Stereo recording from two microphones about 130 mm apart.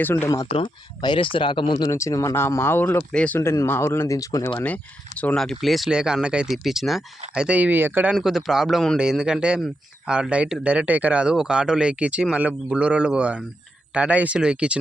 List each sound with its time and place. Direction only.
0.0 s speech: 15° left (ahead or behind)
0.5 s speech: 40° left (ahead or behind)
1.9 s speech: 25° left (ahead or behind)
4.6 s speech: 10° left (ahead or behind); by 8.1 s 15° right (ahead or behind)
8.1 s speech: centre (ahead or behind)